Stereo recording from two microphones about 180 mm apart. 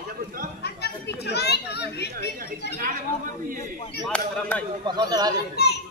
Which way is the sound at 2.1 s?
50° right (ahead or behind).